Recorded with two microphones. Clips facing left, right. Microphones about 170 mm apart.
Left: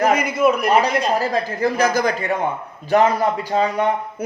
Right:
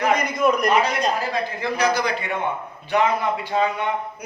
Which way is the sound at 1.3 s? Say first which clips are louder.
Left 5 dB; 40° left (ahead or behind).